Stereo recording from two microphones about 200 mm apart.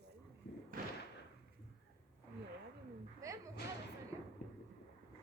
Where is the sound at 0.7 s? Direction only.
45° right (ahead or behind).